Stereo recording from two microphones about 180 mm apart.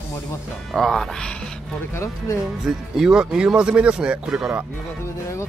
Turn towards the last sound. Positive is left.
turn(degrees=-5)  # may be behind; listen again after turning